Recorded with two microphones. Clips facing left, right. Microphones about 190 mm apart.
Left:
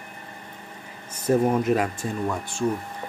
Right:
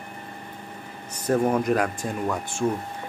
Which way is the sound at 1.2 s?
5° left (ahead or behind).